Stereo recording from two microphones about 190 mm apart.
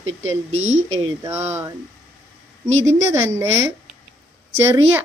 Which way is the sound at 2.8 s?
15° right (ahead or behind).